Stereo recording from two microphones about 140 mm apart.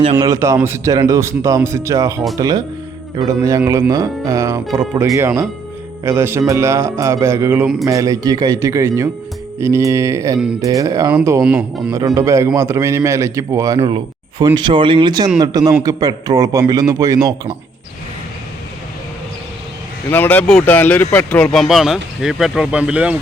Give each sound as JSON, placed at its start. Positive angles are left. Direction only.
{"t": 0.3, "sound": "speech", "side_deg": -20}
{"t": 13.7, "sound": "speech", "side_deg": -40}
{"t": 20.1, "sound": "speech", "side_deg": 15}